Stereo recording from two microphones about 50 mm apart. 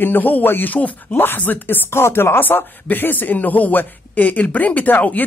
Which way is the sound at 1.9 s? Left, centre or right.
Left.